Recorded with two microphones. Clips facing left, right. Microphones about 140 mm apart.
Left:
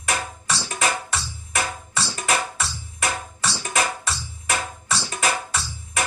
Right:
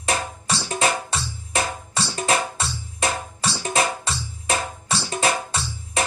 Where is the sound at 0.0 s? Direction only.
30° right (ahead or behind).